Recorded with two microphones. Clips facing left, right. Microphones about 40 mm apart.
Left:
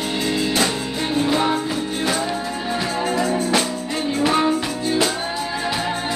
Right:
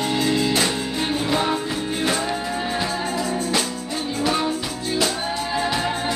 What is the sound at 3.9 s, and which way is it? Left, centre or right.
Music, left.